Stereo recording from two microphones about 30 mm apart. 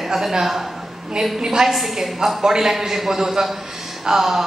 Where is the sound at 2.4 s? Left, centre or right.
Centre.